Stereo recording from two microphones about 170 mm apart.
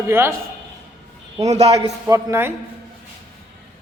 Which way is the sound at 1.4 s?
40° right (ahead or behind).